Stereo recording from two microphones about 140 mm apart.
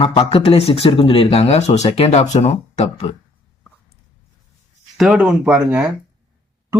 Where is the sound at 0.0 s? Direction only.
45° left (ahead or behind).